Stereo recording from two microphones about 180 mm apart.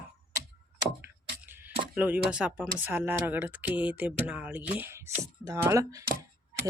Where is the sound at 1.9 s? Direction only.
10° right (ahead or behind).